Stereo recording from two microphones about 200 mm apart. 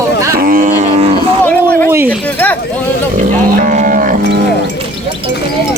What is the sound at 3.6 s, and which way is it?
Music, 40° right (ahead or behind).